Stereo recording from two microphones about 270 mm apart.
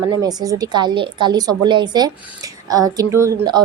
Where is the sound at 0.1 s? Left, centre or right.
Centre.